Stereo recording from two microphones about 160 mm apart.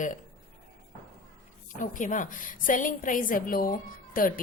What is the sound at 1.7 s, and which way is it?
A woman's voice, 55° left (ahead or behind).